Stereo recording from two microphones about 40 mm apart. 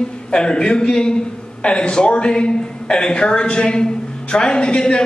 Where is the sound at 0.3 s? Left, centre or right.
Left.